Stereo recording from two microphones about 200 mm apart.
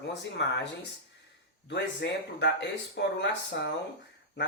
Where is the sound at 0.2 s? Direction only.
65° left (ahead or behind).